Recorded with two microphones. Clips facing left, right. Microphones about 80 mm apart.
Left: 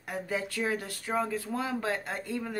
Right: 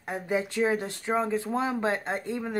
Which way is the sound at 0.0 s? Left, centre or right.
Right.